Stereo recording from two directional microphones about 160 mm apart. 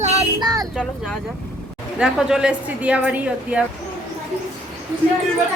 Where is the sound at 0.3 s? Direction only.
25° right (ahead or behind).